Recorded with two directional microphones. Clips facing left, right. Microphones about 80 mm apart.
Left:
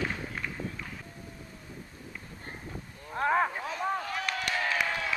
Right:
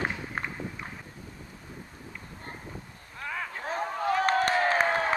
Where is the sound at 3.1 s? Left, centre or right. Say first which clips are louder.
Left 10 dB; left.